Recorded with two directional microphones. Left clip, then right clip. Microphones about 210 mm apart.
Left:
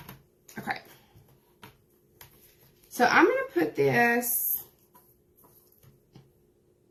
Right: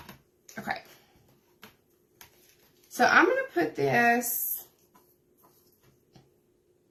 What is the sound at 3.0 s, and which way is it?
A woman's voice, 10° right (ahead or behind).